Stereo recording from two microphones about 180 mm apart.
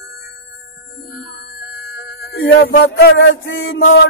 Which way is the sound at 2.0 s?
75° left (ahead or behind).